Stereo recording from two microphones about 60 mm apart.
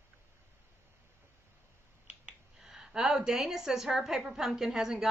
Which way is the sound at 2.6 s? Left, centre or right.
Centre.